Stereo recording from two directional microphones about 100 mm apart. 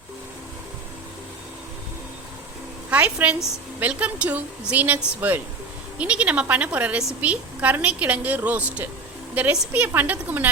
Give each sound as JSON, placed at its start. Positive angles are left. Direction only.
{"t": 2.9, "sound": "a woman's voice", "side_deg": -15}
{"t": 6.0, "sound": "a woman's voice", "side_deg": -15}